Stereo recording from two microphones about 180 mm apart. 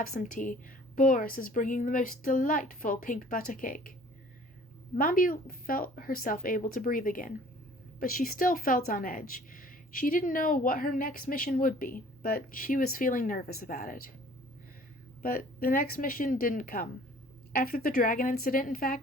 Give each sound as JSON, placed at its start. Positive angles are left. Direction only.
{"t": 0.0, "sound": "a woman's voice", "side_deg": 45}
{"t": 4.9, "sound": "a woman's voice", "side_deg": 50}
{"t": 15.2, "sound": "a woman's voice", "side_deg": 55}